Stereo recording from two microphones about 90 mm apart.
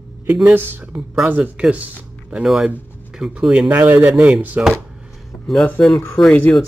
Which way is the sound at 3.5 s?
15° right (ahead or behind).